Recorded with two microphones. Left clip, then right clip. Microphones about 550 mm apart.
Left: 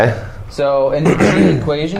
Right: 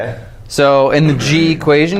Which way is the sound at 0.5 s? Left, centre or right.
Right.